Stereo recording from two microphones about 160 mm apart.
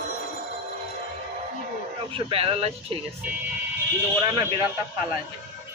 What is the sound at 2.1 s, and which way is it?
Speech, 35° right (ahead or behind).